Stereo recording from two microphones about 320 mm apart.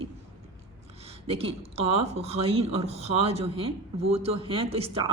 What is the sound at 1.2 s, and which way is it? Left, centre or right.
Speech, centre.